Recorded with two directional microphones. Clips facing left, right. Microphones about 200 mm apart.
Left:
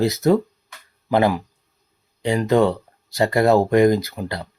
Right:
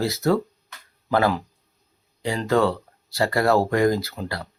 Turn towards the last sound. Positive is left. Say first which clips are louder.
# left 4 dB
turn(degrees=20)  # may be behind; listen again after turning